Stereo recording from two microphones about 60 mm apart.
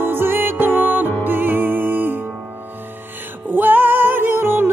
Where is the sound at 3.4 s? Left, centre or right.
Right.